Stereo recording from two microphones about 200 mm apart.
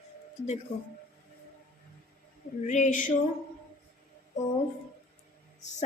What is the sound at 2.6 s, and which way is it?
Speech, 35° left (ahead or behind).